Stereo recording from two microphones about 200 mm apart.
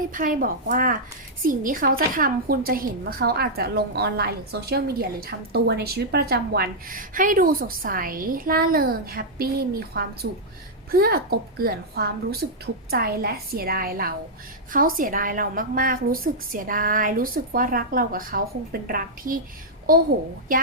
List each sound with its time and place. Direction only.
0.1 s a woman's voice: 40° right (ahead or behind)